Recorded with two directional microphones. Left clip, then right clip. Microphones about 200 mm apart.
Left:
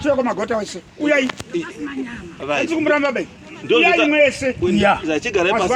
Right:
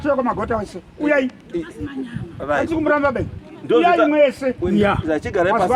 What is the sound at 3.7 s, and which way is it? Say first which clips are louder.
Speech: even; 15° right (ahead or behind).